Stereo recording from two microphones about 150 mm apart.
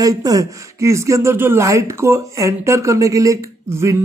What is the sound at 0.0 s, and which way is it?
Speech, 25° right (ahead or behind).